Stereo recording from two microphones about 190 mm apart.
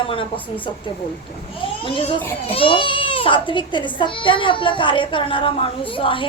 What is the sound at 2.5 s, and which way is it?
A child's voice, 25° left (ahead or behind).